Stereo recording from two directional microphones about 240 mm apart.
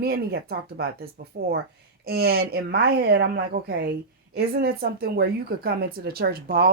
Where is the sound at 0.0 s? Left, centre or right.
Right.